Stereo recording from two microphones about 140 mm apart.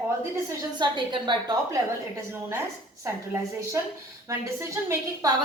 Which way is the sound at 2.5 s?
20° right (ahead or behind).